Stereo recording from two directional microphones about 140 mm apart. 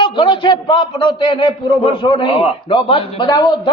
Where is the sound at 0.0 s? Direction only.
35° left (ahead or behind).